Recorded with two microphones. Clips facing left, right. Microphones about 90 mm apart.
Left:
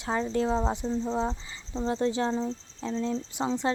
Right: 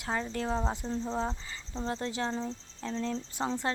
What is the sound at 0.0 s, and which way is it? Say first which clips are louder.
Speech: left 6 dB; 25° left (ahead or behind).